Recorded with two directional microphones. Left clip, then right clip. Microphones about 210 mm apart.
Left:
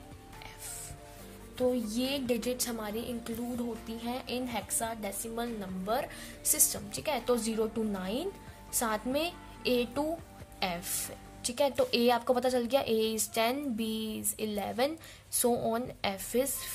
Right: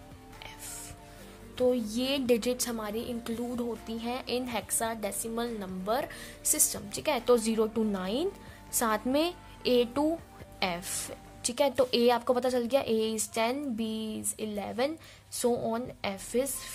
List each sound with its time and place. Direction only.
1.6 s a woman's voice: 20° right (ahead or behind)